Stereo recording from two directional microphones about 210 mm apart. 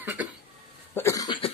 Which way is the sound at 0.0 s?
5° right (ahead or behind).